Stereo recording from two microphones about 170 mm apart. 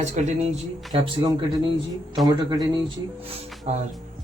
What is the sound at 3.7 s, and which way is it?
Speech, 40° right (ahead or behind).